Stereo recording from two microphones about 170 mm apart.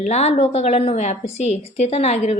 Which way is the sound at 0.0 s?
40° left (ahead or behind).